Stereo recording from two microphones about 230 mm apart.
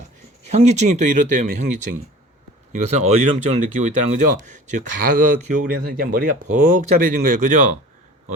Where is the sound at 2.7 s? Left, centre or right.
Right.